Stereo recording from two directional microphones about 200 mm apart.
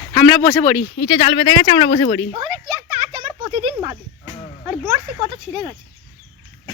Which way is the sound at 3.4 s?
20° right (ahead or behind).